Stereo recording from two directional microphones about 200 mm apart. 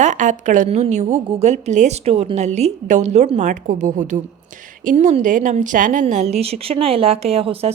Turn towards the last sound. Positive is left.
turn(degrees=-30)  # may be behind; listen again after turning